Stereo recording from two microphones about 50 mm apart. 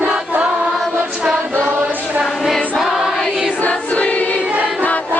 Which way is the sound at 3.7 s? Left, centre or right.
Left.